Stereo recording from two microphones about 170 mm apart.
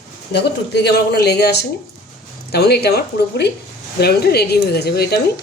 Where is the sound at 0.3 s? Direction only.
75° left (ahead or behind).